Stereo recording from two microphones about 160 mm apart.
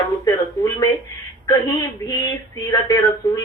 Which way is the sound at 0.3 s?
20° left (ahead or behind).